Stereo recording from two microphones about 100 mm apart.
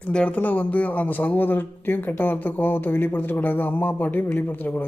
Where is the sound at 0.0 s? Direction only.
10° left (ahead or behind).